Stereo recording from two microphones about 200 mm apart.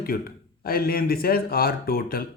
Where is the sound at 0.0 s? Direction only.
50° left (ahead or behind).